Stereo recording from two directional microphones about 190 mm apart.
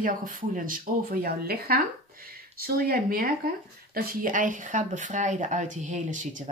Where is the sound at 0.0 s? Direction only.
45° right (ahead or behind).